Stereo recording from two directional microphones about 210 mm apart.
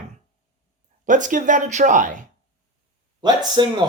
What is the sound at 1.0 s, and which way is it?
Speech, 40° right (ahead or behind).